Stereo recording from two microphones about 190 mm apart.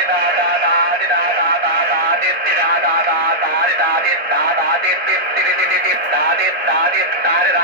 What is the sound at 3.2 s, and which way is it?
Radio, 55° right (ahead or behind).